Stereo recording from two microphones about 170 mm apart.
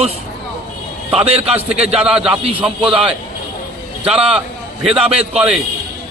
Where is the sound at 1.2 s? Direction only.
35° right (ahead or behind).